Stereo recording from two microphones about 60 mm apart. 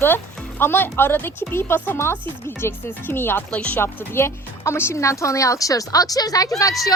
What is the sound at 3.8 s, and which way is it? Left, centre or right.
Speech, left.